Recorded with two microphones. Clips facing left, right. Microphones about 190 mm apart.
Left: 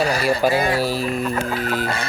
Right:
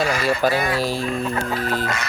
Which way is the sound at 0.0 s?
35° left (ahead or behind).